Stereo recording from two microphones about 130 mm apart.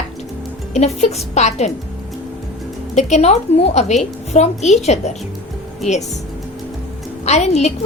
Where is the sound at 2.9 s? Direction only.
60° left (ahead or behind).